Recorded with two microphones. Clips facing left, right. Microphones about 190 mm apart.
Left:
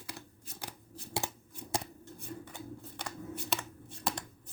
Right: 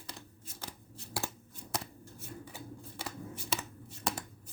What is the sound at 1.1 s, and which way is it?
Scissors, 20° left (ahead or behind).